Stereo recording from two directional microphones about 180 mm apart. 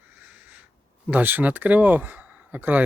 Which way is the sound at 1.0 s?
10° right (ahead or behind).